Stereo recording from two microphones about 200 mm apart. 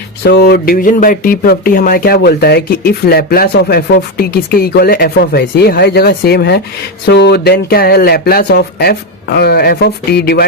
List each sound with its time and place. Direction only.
0.3 s speech: 55° left (ahead or behind)